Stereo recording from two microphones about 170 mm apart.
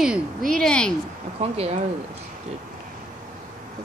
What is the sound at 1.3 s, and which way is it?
Speech, 35° right (ahead or behind).